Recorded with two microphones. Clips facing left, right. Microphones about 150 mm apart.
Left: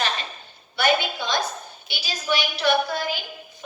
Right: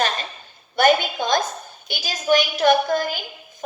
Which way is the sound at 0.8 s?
45° right (ahead or behind).